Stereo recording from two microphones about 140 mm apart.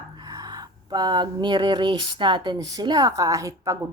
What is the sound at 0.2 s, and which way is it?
A woman's voice, 25° right (ahead or behind).